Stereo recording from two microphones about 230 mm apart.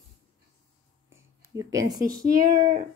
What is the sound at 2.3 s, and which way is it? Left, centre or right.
Speech, right.